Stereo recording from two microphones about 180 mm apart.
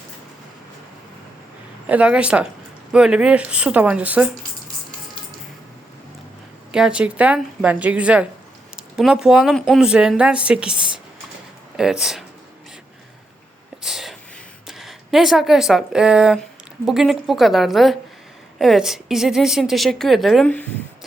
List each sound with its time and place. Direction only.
1.9 s a woman's voice: 5° right (ahead or behind)
6.7 s a woman's voice: 5° right (ahead or behind)
13.8 s whispering: centre (ahead or behind)
14.7 s a woman's voice: centre (ahead or behind)